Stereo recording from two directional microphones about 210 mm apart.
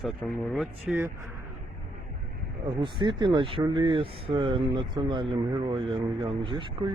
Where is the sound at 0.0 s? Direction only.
Centre (ahead or behind).